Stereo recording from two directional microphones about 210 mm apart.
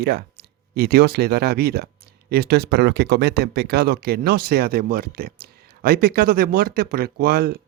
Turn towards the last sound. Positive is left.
turn(degrees=-45)  # may be behind; listen again after turning